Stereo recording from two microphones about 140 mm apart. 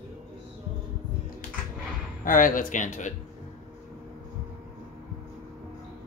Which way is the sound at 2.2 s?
75° left (ahead or behind).